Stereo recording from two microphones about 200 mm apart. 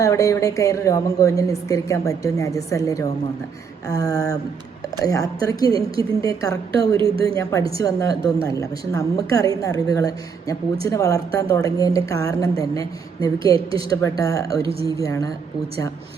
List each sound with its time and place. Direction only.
0.0 s a woman's voice: 15° left (ahead or behind)
7.0 s a woman's voice: 25° right (ahead or behind)
7.8 s a woman's voice: 15° left (ahead or behind)